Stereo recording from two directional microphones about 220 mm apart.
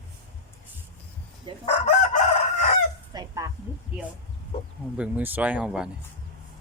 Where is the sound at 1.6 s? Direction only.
30° left (ahead or behind).